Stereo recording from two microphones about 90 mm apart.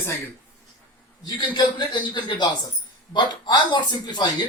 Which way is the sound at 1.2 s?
50° left (ahead or behind).